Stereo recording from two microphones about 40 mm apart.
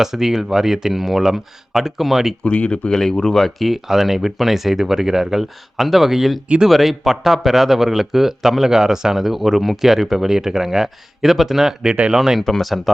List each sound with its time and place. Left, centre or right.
0.0 s a man's voice: centre
2.4 s speech: left
3.0 s a man's voice: centre
12.4 s speech: centre